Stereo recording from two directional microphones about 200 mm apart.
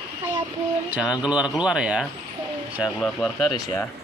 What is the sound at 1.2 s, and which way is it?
Speech, 5° right (ahead or behind).